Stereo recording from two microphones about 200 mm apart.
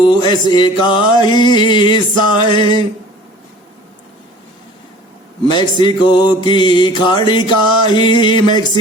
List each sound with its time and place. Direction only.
0.0 s music: 20° left (ahead or behind)
5.5 s music: 20° left (ahead or behind)